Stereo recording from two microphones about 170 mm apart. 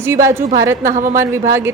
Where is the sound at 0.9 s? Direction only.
50° right (ahead or behind).